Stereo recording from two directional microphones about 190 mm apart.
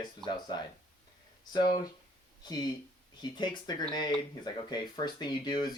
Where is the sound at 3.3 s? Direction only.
20° left (ahead or behind).